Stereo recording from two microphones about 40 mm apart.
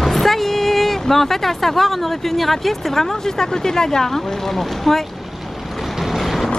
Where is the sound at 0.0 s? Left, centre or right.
Centre.